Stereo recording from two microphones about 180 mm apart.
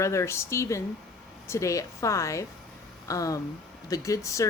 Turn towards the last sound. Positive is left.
turn(degrees=15)  # may be behind; listen again after turning